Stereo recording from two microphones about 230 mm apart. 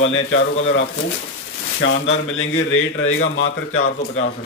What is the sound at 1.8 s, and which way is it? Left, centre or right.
A man's voice, left.